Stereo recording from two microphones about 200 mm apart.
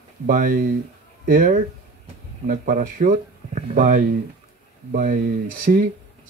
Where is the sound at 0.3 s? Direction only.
45° right (ahead or behind).